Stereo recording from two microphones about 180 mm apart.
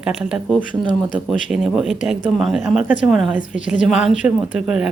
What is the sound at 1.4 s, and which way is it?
Speech, centre (ahead or behind).